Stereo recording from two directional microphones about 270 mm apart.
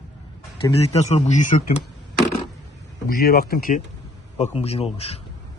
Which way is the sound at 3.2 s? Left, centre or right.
Left.